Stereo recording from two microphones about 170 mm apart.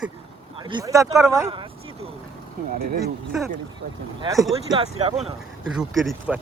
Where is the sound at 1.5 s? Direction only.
30° right (ahead or behind).